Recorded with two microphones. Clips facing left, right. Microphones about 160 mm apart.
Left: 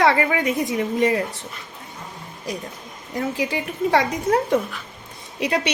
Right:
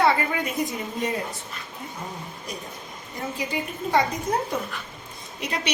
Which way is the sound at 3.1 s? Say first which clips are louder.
Left 5 dB; 90° left.